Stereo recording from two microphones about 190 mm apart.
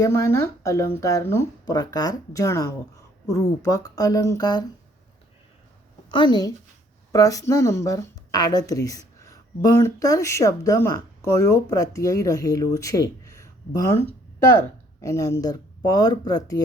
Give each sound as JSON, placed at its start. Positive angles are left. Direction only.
{"t": 0.0, "sound": "speech", "side_deg": 15}
{"t": 6.1, "sound": "a woman's voice", "side_deg": 25}